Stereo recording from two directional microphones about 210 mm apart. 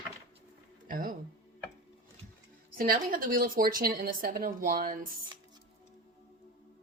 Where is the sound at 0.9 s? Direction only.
40° right (ahead or behind).